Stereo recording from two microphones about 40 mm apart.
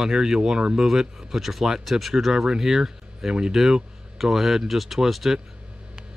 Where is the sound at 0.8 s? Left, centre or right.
Centre.